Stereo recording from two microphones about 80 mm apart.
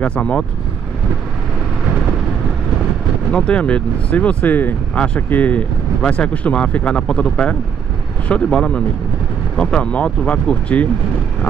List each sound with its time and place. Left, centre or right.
0.0 s speech: centre
3.3 s speech: centre